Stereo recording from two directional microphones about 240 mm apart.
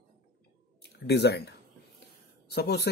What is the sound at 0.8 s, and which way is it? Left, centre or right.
Speech, left.